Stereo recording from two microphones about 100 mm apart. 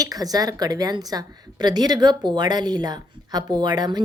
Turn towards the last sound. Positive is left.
turn(degrees=-45)  # may be behind; listen again after turning